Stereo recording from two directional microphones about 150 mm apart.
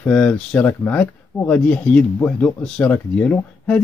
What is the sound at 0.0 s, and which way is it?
Speech, 10° left (ahead or behind).